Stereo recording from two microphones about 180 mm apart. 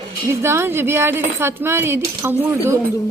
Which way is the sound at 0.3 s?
15° right (ahead or behind).